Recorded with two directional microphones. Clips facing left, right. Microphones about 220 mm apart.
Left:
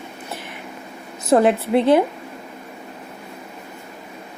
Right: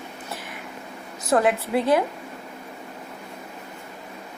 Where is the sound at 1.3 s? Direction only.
25° left (ahead or behind).